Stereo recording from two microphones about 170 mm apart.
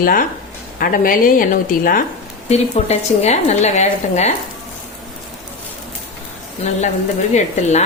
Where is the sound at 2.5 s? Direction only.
40° left (ahead or behind).